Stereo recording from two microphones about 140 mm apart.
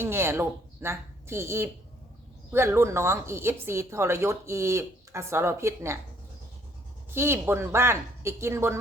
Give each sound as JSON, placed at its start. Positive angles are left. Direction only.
{"t": 0.0, "sound": "speech", "side_deg": -15}
{"t": 7.1, "sound": "speech", "side_deg": -15}